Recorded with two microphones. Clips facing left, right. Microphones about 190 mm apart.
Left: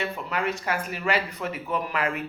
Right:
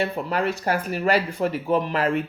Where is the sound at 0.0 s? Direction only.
35° right (ahead or behind).